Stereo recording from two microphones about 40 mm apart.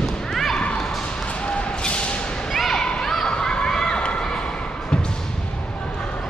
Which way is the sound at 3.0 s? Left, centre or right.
Centre.